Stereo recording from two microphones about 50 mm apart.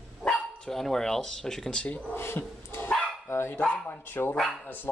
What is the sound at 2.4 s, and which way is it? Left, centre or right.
Dog, left.